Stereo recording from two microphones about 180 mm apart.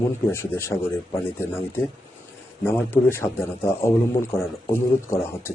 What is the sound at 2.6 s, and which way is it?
A man's voice, 15° left (ahead or behind).